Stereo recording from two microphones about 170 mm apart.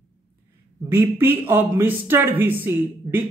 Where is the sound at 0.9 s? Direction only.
15° right (ahead or behind).